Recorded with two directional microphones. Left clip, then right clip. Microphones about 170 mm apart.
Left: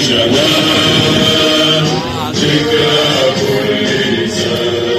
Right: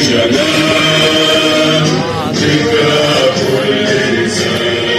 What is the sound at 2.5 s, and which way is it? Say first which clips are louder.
Chant: even; 70° right (ahead or behind).